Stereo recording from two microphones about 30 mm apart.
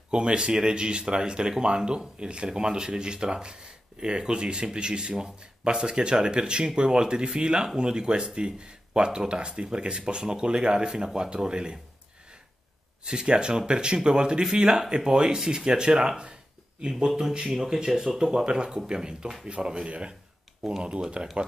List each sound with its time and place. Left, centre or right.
0.1 s speech: right
13.0 s speech: right
17.2 s speech: right
18.4 s speech: right